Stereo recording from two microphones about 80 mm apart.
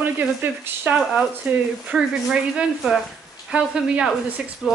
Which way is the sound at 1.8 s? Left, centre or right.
Centre.